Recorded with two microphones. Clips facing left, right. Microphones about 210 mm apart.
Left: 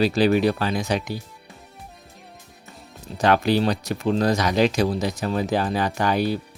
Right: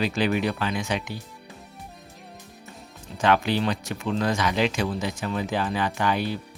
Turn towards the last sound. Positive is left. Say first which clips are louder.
# left 4 dB
turn(degrees=40)  # may be behind; listen again after turning